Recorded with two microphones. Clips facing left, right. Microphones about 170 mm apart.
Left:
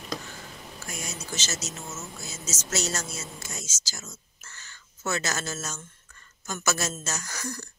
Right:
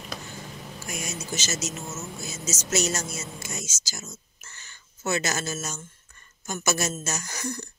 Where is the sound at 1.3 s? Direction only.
15° right (ahead or behind).